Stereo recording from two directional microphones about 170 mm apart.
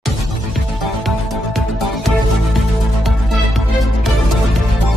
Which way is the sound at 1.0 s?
Centre (ahead or behind).